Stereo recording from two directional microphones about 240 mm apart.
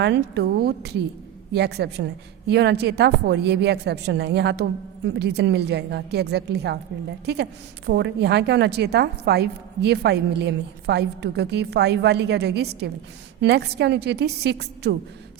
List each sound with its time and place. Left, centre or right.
0.0 s a woman's voice: right